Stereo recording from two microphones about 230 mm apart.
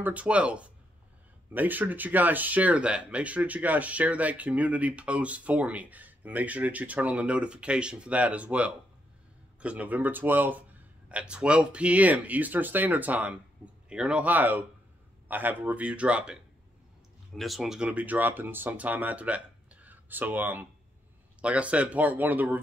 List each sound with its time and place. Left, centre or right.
0.0 s speech: centre
17.4 s speech: centre